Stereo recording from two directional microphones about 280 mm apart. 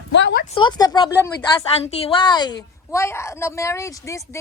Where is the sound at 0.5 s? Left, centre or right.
Centre.